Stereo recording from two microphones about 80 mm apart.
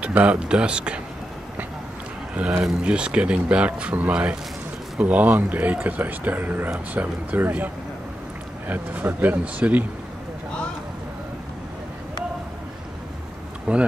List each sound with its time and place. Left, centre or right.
0.0 s speech: centre
2.6 s speech: centre
13.7 s speech: centre